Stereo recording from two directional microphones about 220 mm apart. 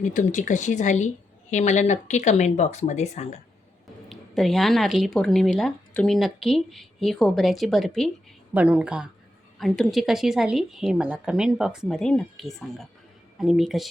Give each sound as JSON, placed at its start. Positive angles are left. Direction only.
{"t": 0.0, "sound": "a woman's voice", "side_deg": 35}
{"t": 4.1, "sound": "speech", "side_deg": 0}